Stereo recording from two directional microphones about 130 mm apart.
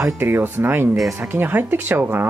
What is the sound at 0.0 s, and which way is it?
Speech, 15° right (ahead or behind).